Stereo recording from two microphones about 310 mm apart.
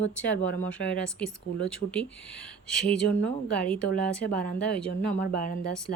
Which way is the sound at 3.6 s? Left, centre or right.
Centre.